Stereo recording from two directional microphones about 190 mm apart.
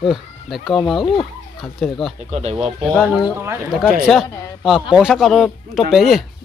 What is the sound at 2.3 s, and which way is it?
Speech, 35° right (ahead or behind).